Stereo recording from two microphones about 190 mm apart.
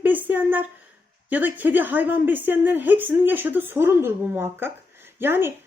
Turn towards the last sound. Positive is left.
turn(degrees=-10)  # may be behind; listen again after turning